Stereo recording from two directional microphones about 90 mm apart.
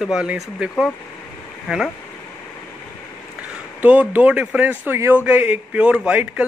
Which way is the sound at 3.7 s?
15° right (ahead or behind).